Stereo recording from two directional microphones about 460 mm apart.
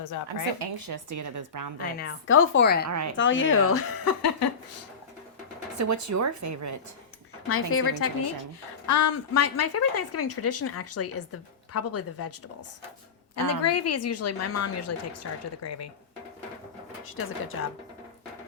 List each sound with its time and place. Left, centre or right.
0.6 s speech: right
2.0 s a woman's voice: left
2.9 s speech: right
3.2 s a woman's voice: left
5.7 s speech: right
7.4 s a woman's voice: left
13.3 s a woman's voice: left
17.1 s a woman's voice: left